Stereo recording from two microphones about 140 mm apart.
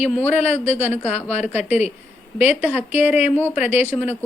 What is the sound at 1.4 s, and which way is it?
A woman's voice, 10° right (ahead or behind).